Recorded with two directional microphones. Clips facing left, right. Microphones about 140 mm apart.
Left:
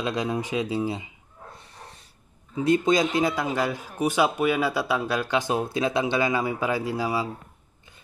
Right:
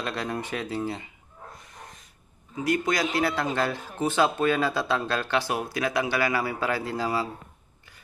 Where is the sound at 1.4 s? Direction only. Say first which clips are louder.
Even; 30° left (ahead or behind).